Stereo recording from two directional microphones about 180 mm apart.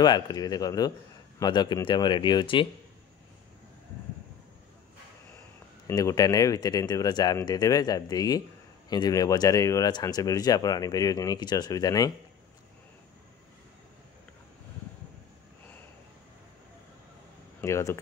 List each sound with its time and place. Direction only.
0.0 s speech: 20° left (ahead or behind)
5.9 s speech: 20° left (ahead or behind)
17.6 s speech: 15° left (ahead or behind)